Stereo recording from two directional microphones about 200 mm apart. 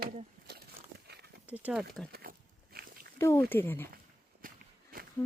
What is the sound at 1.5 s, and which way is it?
Speech, 5° right (ahead or behind).